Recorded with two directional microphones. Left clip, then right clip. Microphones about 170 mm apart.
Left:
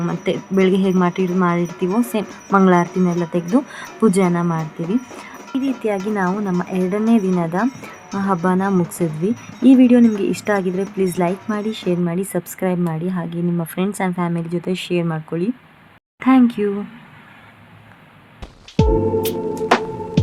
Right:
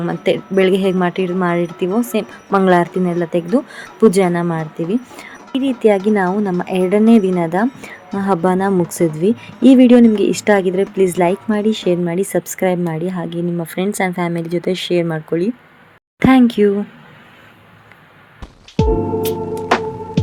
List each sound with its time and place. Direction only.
0.0 s speech: 15° right (ahead or behind)
18.8 s music: centre (ahead or behind)